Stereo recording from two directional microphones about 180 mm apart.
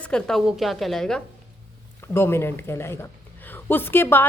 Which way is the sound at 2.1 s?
15° left (ahead or behind).